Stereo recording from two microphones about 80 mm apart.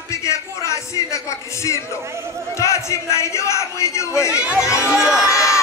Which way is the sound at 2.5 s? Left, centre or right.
Left.